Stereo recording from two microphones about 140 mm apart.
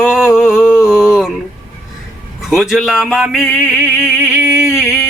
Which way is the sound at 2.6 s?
5° right (ahead or behind).